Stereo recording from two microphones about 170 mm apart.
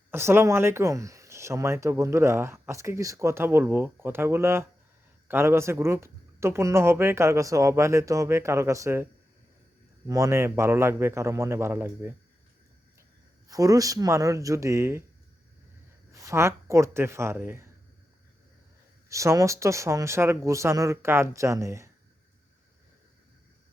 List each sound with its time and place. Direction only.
0.1 s speech: 15° right (ahead or behind)
10.1 s speech: 15° right (ahead or behind)
13.5 s speech: 20° right (ahead or behind)
16.1 s speech: 15° right (ahead or behind)
19.0 s speech: 15° right (ahead or behind)